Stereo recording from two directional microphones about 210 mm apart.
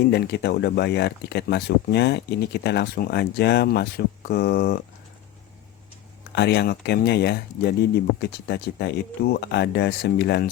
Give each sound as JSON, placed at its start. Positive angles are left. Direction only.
{"t": 0.1, "sound": "speech", "side_deg": 55}
{"t": 6.3, "sound": "speech", "side_deg": 50}